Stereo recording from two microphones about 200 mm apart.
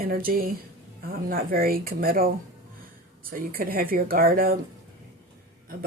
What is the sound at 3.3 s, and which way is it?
Speech, 45° right (ahead or behind).